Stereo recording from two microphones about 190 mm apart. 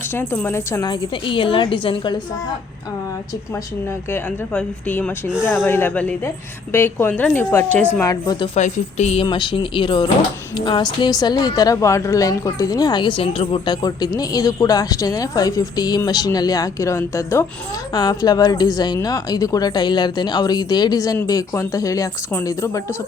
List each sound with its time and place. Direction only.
0.1 s a woman's voice: 10° left (ahead or behind); by 2.2 s 25° left (ahead or behind)
3.5 s speech: 10° left (ahead or behind)
8.5 s a woman's voice: 40° left (ahead or behind); by 23.0 s 15° left (ahead or behind)